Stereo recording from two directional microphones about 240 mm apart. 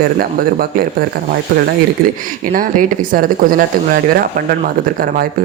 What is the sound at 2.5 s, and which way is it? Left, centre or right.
Speech, right.